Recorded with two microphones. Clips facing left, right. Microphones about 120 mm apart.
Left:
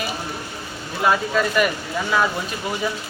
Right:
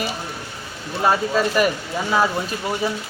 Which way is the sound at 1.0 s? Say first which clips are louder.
Right 1 dB; 30° right (ahead or behind).